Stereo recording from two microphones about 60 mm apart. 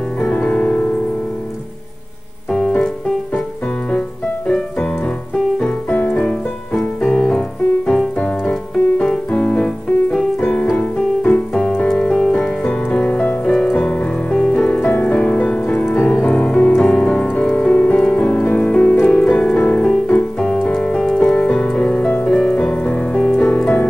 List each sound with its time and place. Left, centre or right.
0.3 s music: centre
4.5 s music: centre
10.8 s music: centre
14.7 s music: left; by 22.8 s centre
22.8 s music: left